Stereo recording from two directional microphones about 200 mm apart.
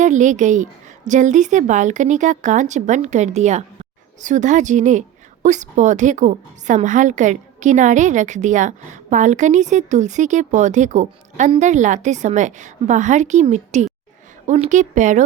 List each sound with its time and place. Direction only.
0.0 s a woman's voice: 40° right (ahead or behind)